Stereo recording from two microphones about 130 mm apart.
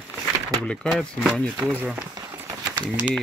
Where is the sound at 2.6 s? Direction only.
30° right (ahead or behind).